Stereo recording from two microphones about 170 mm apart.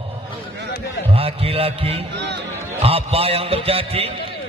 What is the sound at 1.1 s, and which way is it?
Mantra, 35° right (ahead or behind).